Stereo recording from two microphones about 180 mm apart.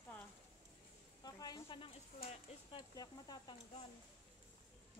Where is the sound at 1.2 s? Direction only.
25° left (ahead or behind).